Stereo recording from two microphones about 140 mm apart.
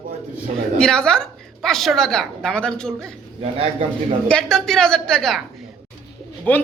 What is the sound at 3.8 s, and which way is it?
Speech, 40° right (ahead or behind).